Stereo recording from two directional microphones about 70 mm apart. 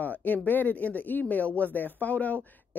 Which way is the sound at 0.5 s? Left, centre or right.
Left.